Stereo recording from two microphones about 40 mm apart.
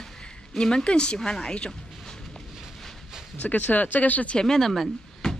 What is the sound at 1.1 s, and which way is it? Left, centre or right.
Speech, centre.